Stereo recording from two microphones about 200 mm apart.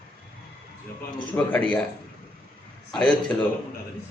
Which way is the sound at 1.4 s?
5° left (ahead or behind).